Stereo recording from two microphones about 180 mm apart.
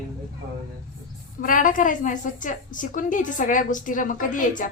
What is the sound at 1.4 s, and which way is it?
A woman's voice, 50° left (ahead or behind).